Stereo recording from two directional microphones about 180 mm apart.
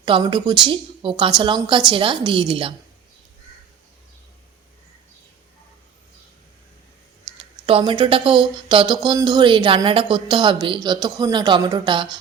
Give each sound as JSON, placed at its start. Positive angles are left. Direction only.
{"t": 0.0, "sound": "speech", "side_deg": -25}
{"t": 7.7, "sound": "speech", "side_deg": -30}